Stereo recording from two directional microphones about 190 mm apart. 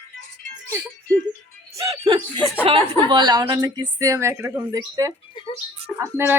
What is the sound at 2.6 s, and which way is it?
A woman's voice, 30° right (ahead or behind).